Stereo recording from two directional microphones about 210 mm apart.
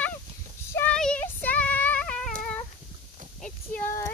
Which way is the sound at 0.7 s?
10° left (ahead or behind).